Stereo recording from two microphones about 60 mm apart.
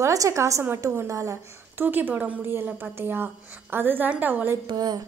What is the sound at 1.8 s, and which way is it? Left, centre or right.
A woman's voice, right.